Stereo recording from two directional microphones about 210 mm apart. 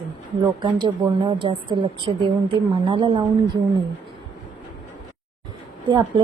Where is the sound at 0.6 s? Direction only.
20° right (ahead or behind).